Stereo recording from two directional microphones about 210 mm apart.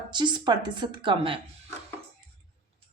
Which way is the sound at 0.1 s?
20° right (ahead or behind).